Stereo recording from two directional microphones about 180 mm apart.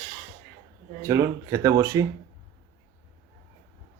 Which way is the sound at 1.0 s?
15° right (ahead or behind).